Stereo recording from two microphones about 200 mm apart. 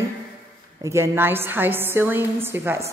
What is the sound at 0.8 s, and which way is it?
A woman's voice, 15° right (ahead or behind).